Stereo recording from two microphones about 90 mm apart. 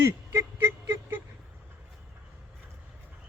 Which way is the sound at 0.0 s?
25° right (ahead or behind).